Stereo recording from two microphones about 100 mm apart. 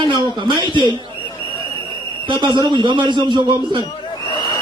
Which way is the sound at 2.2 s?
50° right (ahead or behind).